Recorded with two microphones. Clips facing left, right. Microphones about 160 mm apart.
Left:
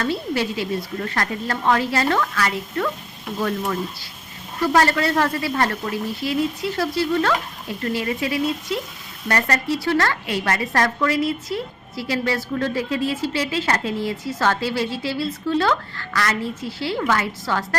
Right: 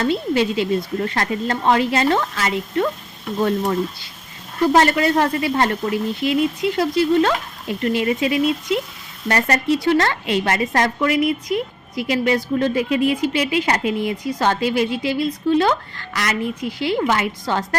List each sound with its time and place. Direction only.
0.0 s a woman's voice: 20° right (ahead or behind)
4.7 s a woman's voice: 20° right (ahead or behind)